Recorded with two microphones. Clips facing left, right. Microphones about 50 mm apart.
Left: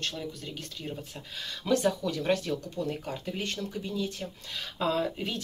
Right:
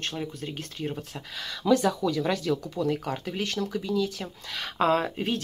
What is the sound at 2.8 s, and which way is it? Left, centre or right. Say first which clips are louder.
Speech: right 6 dB; right.